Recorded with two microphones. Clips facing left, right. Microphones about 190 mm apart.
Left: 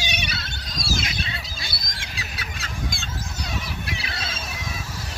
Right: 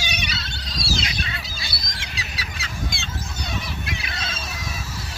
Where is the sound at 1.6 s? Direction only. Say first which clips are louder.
Right 1 dB; 50° left (ahead or behind).